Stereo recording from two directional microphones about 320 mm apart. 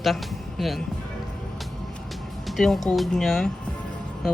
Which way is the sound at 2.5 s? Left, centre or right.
Centre.